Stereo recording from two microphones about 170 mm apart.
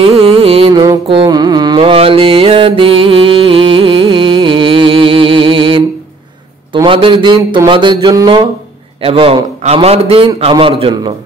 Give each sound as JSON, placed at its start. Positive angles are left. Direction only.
{"t": 0.0, "sound": "music", "side_deg": -35}
{"t": 6.7, "sound": "a sound", "side_deg": -30}
{"t": 9.0, "sound": "a man's voice", "side_deg": -35}